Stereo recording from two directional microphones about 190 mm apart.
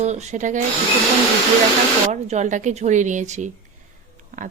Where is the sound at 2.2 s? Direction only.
35° right (ahead or behind).